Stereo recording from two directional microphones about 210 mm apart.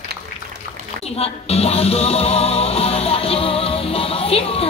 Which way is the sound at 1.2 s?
30° left (ahead or behind).